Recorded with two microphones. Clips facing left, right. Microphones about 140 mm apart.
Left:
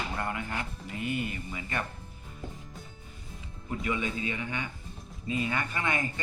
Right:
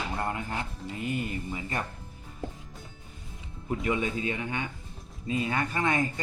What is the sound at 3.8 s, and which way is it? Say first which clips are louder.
Speech: right 3 dB; 40° right (ahead or behind).